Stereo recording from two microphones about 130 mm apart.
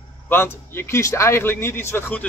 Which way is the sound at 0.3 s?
20° left (ahead or behind).